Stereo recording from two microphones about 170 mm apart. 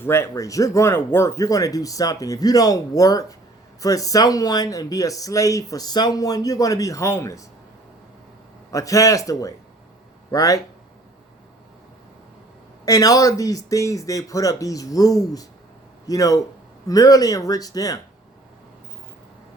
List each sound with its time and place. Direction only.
0.0 s speech: 15° left (ahead or behind)
8.7 s speech: 20° left (ahead or behind)
12.8 s speech: 20° left (ahead or behind)